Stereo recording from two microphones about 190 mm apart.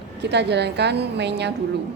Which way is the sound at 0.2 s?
60° right (ahead or behind).